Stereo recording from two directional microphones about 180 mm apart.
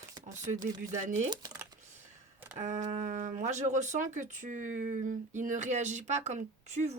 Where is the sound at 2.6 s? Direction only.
40° right (ahead or behind).